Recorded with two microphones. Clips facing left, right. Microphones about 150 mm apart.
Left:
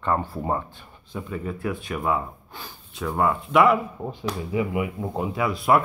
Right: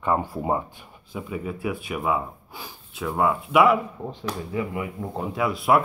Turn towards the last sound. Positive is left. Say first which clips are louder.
# even
turn(degrees=0)  # may be behind; listen again after turning